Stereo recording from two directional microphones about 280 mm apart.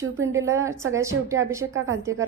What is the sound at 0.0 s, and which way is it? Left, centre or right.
A woman's voice, centre.